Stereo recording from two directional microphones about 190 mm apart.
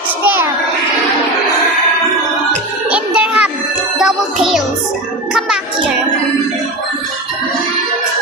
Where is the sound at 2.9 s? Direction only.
5° right (ahead or behind).